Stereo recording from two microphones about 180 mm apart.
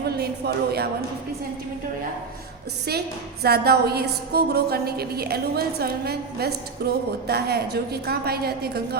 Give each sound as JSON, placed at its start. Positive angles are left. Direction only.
{"t": 0.2, "sound": "a woman's voice", "side_deg": -60}
{"t": 3.4, "sound": "a woman's voice", "side_deg": -60}